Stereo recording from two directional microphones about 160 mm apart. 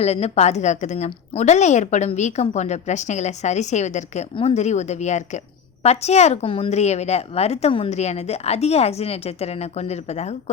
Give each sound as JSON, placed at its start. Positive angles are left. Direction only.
{"t": 0.0, "sound": "a woman's voice", "side_deg": 40}